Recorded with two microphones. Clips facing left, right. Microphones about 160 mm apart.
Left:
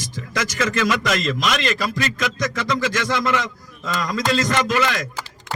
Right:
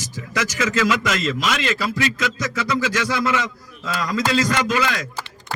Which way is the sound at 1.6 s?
5° right (ahead or behind).